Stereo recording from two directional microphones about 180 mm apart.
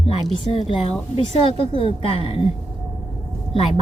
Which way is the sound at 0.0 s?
30° left (ahead or behind).